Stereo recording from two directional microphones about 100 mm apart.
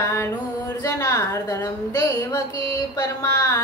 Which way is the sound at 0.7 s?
35° left (ahead or behind).